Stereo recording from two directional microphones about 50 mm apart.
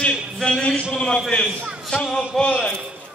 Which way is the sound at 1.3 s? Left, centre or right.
Centre.